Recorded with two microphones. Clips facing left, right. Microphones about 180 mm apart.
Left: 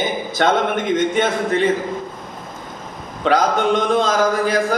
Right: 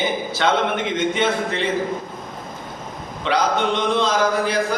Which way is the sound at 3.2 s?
45° left (ahead or behind).